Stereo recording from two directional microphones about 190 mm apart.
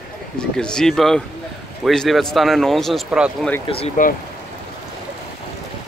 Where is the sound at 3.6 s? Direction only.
30° left (ahead or behind).